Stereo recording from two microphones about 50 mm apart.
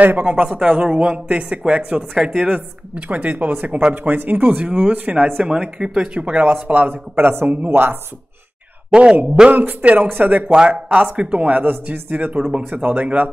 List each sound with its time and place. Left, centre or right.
0.0 s a man's voice: right
0.5 s speech: centre
2.3 s speech: centre
2.9 s a man's voice: right
5.4 s speech: centre
6.9 s a man's voice: right
8.9 s speech: centre
9.5 s a man's voice: right
11.6 s a man's voice: right